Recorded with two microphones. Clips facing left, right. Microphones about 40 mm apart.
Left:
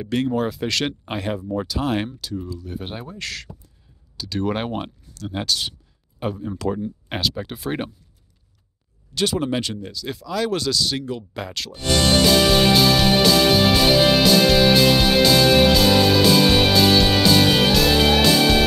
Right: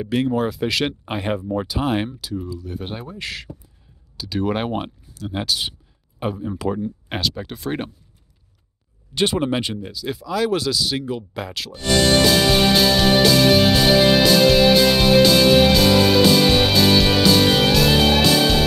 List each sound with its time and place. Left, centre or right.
0.0 s speech: centre
1.5 s speech: centre
3.2 s speech: centre
9.1 s speech: right; by 12.1 s centre
12.7 s music: centre